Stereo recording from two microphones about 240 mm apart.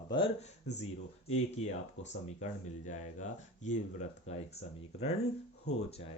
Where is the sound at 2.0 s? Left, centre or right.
Left.